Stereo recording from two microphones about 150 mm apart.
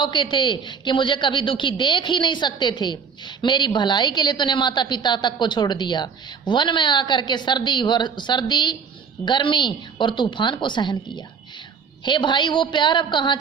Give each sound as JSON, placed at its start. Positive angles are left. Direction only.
{"t": 0.0, "sound": "a man's voice", "side_deg": 30}